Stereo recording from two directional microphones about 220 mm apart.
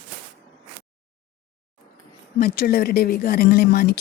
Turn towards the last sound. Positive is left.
turn(degrees=45)  # may be behind; listen again after turning